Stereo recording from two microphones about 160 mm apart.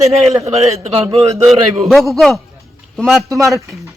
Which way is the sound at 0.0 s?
40° right (ahead or behind).